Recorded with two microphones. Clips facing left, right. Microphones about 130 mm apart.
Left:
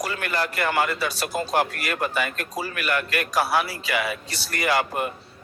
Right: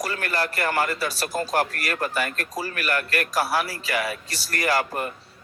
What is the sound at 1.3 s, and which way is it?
Speech, 20° left (ahead or behind).